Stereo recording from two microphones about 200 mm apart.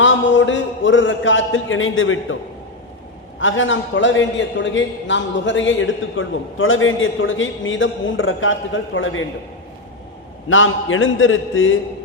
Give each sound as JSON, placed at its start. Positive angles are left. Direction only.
{"t": 0.0, "sound": "a man's voice", "side_deg": 70}
{"t": 3.4, "sound": "a man's voice", "side_deg": 75}
{"t": 10.5, "sound": "a man's voice", "side_deg": 80}